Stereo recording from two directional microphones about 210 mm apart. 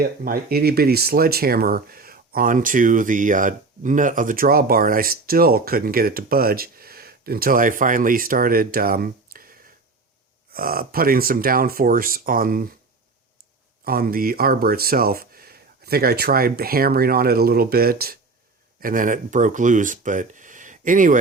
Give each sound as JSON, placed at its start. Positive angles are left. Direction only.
{"t": 0.0, "sound": "speech", "side_deg": -45}
{"t": 13.8, "sound": "speech", "side_deg": -45}